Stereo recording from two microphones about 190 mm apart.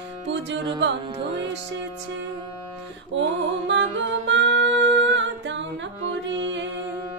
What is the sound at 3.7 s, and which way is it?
Music, 70° right (ahead or behind).